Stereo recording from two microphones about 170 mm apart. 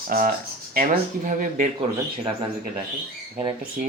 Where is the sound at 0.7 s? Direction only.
55° right (ahead or behind).